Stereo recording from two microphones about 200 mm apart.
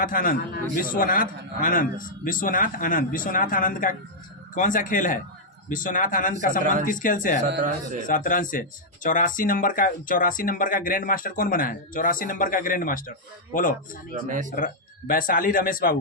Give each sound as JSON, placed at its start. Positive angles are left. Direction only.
{"t": 0.0, "sound": "speech", "side_deg": 45}